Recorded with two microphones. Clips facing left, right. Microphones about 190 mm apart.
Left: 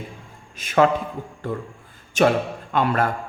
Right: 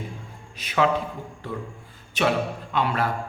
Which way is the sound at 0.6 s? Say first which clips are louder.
Left 5 dB; 45° left (ahead or behind).